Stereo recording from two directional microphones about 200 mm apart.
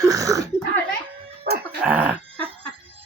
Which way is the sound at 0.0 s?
15° right (ahead or behind).